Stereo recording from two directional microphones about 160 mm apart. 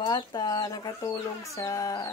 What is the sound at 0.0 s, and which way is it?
Speech, 25° left (ahead or behind).